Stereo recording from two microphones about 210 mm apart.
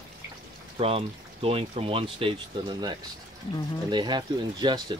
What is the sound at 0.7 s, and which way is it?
Speech, 25° right (ahead or behind).